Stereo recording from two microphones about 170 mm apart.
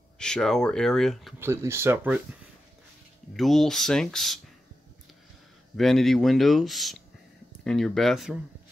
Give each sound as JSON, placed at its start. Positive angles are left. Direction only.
{"t": 0.2, "sound": "speech", "side_deg": 5}
{"t": 1.4, "sound": "speech", "side_deg": -15}
{"t": 3.3, "sound": "speech", "side_deg": 0}
{"t": 5.8, "sound": "speech", "side_deg": 0}